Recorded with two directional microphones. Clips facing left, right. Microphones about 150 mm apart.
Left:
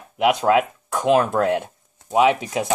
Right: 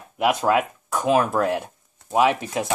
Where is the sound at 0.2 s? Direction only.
Centre (ahead or behind).